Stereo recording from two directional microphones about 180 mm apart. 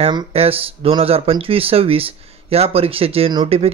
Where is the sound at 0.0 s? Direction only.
30° right (ahead or behind).